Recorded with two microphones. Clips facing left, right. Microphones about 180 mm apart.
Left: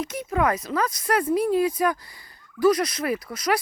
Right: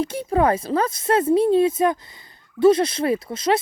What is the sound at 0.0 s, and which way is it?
Speech, 30° right (ahead or behind).